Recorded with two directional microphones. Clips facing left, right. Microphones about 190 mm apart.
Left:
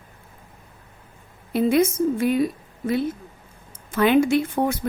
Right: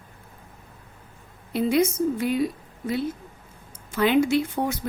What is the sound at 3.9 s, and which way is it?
Speech, 55° left (ahead or behind).